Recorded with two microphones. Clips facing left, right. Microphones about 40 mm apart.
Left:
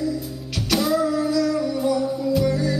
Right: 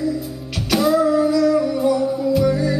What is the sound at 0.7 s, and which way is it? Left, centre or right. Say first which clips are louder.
Music: right 5 dB; centre.